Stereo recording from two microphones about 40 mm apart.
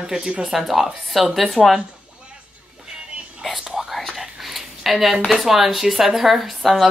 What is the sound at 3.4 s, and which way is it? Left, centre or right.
Whispering, centre.